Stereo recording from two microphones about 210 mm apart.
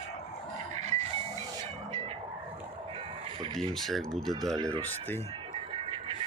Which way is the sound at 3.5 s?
Centre (ahead or behind).